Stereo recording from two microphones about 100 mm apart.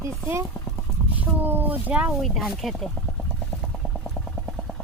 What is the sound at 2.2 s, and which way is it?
Speech, centre (ahead or behind).